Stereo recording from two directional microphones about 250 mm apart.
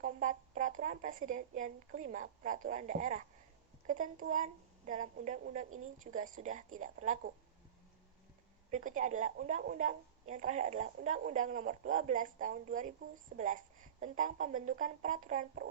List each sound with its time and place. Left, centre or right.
0.0 s speech: right
8.7 s speech: right